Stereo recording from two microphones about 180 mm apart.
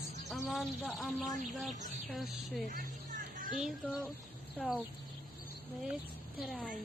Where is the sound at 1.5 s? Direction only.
Centre (ahead or behind).